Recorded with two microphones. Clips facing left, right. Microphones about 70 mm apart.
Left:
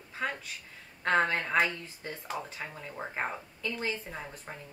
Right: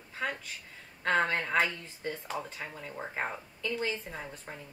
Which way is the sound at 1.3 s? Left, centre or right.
Centre.